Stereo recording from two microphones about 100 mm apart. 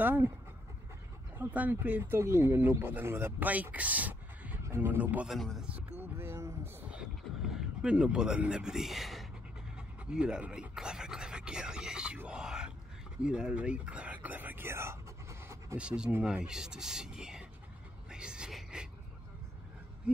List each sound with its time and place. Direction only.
0.0 s speech: 20° right (ahead or behind)
1.4 s speech: 20° right (ahead or behind)
5.3 s a man's voice: centre (ahead or behind)
5.7 s speech: 20° right (ahead or behind)
6.9 s a sound: 5° right (ahead or behind)
9.8 s speech: 10° right (ahead or behind)
12.2 s groan: 10° right (ahead or behind)
13.2 s whispering: 10° right (ahead or behind); by 15.8 s 25° right (ahead or behind)
15.8 s speech: 10° right (ahead or behind)
18.1 s a sound: 10° right (ahead or behind)